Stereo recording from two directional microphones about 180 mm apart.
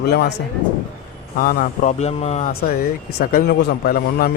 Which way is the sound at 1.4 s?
50° left (ahead or behind).